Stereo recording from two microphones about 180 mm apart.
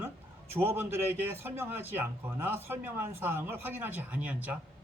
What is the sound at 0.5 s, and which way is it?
A man's voice, 15° right (ahead or behind).